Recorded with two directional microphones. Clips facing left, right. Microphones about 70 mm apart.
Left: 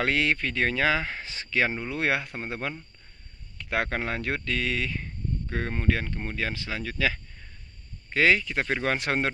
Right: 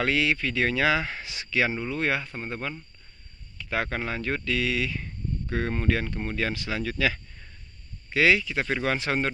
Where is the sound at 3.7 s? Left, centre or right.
Left.